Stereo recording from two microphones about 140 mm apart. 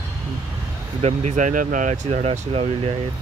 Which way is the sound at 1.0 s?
50° right (ahead or behind).